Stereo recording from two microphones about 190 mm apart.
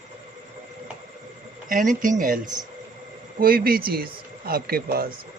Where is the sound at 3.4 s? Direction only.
50° right (ahead or behind).